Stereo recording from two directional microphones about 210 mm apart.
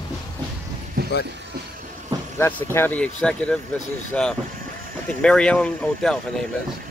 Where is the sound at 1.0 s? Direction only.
50° right (ahead or behind).